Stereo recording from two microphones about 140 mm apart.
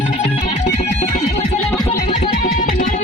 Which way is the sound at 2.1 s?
65° left (ahead or behind).